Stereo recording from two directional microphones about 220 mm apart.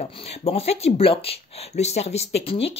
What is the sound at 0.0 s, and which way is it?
Speech, 25° left (ahead or behind).